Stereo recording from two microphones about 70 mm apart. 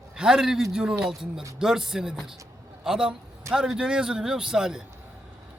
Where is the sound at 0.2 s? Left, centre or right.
Centre.